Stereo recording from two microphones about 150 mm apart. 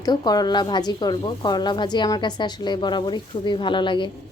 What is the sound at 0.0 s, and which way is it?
A woman's voice, 25° left (ahead or behind).